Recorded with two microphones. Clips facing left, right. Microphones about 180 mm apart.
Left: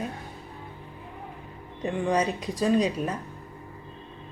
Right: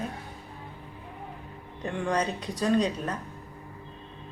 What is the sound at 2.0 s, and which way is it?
Speech, 10° left (ahead or behind).